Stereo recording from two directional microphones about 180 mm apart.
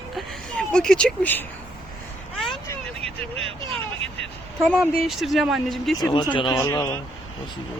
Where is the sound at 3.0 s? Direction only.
30° right (ahead or behind).